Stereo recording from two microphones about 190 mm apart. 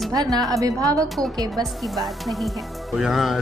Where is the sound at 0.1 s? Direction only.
20° right (ahead or behind).